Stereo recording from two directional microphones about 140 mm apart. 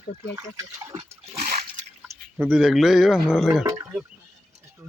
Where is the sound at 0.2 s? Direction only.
20° right (ahead or behind).